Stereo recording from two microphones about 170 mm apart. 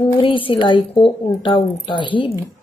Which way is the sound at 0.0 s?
30° left (ahead or behind).